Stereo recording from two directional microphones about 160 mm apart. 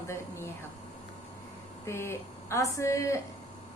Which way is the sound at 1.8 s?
15° left (ahead or behind).